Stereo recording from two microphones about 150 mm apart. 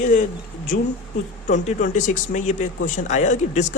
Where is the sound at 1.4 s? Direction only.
55° left (ahead or behind).